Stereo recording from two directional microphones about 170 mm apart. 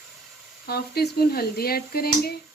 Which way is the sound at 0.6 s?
65° left (ahead or behind).